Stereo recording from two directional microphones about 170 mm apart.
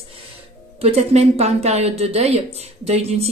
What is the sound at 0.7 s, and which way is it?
Speech, 40° right (ahead or behind).